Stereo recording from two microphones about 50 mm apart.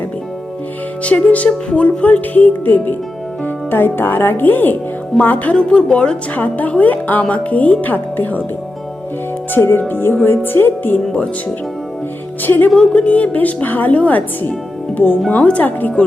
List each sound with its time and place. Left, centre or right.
1.0 s speech: left
5.6 s speech: left
6.3 s speech: left
9.6 s music: left
12.4 s speech: left
12.7 s speech: centre; by 16.0 s left